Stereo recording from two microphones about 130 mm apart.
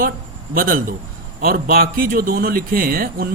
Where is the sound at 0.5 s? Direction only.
90° right.